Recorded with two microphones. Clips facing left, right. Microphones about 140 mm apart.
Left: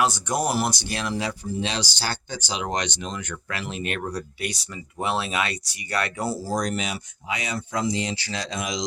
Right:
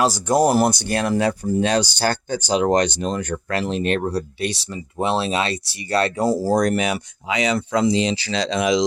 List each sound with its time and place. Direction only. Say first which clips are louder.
0.0 s speech: right 7 dB; 40° right (ahead or behind); by 8.8 s 75° right (ahead or behind)